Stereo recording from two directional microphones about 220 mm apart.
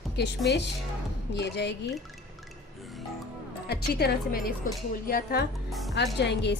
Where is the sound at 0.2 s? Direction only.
50° left (ahead or behind).